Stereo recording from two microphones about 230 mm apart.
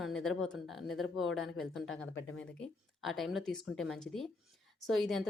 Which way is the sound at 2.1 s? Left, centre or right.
Left.